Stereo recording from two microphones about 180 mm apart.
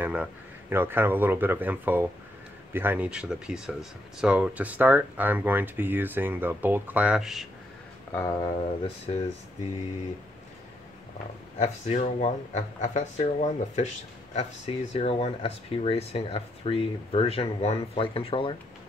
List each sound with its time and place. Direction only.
0.0 s speech: 10° right (ahead or behind)
8.1 s speech: 20° left (ahead or behind)
11.5 s speech: 40° left (ahead or behind)